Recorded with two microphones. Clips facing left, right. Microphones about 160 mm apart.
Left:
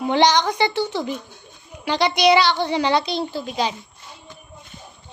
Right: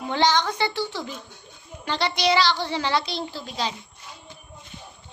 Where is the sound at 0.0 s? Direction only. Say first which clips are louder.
Left 5 dB; 20° left (ahead or behind).